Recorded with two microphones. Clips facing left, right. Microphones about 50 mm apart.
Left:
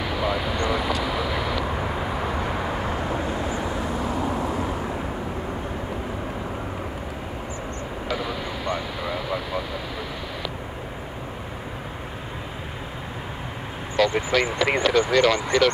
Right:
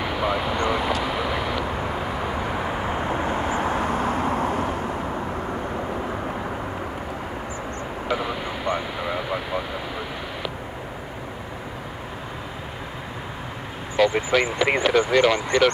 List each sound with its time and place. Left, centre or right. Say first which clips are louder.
0.0 s speech: right 1 dB; centre
1.0 s vehicle: right 1 dB; centre
1.6 s vehicle: even; centre
2.8 s vehicle: right 1 dB; centre
3.1 s vehicle: right 2 dB; right
8.1 s vehicle: right 2 dB; centre
13.9 s speech: right 1 dB; centre